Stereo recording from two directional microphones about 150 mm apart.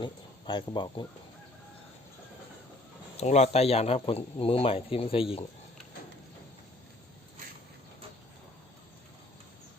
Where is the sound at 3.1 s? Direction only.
50° left (ahead or behind).